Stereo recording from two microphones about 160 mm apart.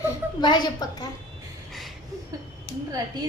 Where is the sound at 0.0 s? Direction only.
25° left (ahead or behind).